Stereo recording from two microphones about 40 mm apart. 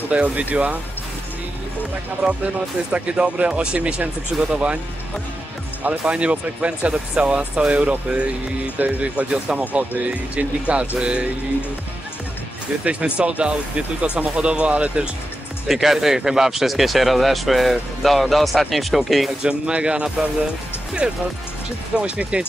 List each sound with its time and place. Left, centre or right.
0.1 s speech: right
2.2 s speech: right
4.3 s speech: centre
5.9 s speech: right
13.2 s speech: right
15.7 s speech: centre
19.4 s speech: right